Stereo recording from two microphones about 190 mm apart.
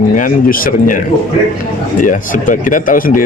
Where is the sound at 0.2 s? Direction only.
45° left (ahead or behind).